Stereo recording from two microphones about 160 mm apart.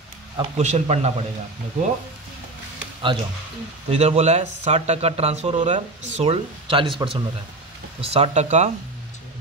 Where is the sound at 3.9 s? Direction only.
40° right (ahead or behind).